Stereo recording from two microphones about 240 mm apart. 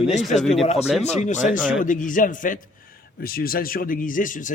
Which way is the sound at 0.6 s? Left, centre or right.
Left.